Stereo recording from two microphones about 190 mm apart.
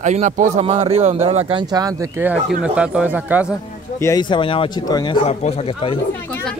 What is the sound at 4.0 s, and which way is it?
Speech, 20° left (ahead or behind).